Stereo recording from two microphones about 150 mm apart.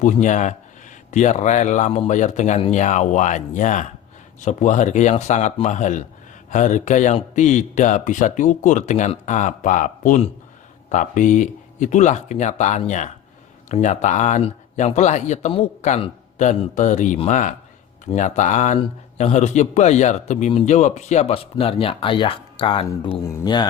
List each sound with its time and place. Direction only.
0.0 s a man's voice: 55° left (ahead or behind); by 22.9 s 35° left (ahead or behind)
22.9 s speech: 20° left (ahead or behind)